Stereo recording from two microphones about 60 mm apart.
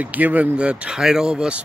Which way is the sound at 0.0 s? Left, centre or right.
Right.